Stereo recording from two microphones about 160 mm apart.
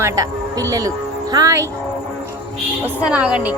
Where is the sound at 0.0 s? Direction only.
20° right (ahead or behind).